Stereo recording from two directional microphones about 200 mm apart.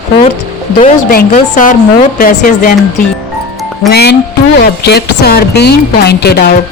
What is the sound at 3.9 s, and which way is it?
Speech, 55° left (ahead or behind).